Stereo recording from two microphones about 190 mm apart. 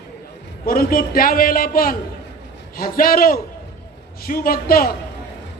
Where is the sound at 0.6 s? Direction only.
50° left (ahead or behind).